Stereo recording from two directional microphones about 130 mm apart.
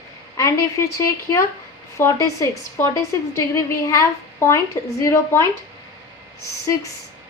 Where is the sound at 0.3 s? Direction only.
20° left (ahead or behind).